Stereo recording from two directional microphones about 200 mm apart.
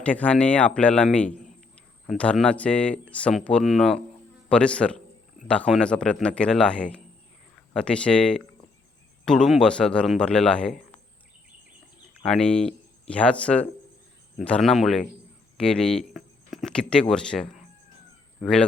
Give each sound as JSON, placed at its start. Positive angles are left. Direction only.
{"t": 0.0, "sound": "a man's voice", "side_deg": 5}
{"t": 12.2, "sound": "a man's voice", "side_deg": 5}